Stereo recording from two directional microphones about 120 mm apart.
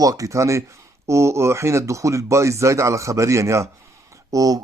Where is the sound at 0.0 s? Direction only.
30° right (ahead or behind).